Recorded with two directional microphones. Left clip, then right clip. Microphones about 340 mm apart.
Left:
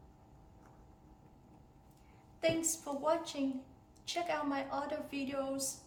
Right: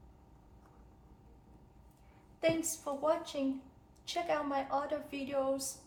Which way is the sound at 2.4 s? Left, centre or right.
Centre.